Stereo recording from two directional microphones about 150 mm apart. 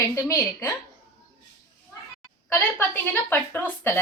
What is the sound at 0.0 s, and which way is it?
Speech, 20° left (ahead or behind).